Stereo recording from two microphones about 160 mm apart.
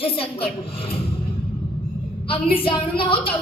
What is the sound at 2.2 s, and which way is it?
A woman's voice, 35° left (ahead or behind).